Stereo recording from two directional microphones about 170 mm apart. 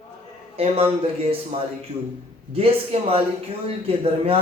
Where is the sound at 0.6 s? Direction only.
35° right (ahead or behind).